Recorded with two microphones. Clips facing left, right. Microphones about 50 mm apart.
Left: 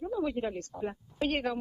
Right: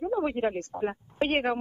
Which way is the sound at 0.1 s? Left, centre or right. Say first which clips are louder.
Right 4 dB; right.